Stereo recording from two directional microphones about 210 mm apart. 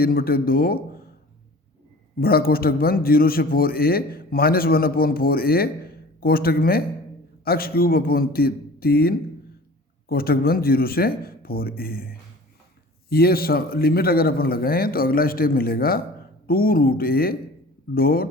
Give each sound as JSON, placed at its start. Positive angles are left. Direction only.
{"t": 0.0, "sound": "a man's voice", "side_deg": 45}
{"t": 2.1, "sound": "a man's voice", "side_deg": 45}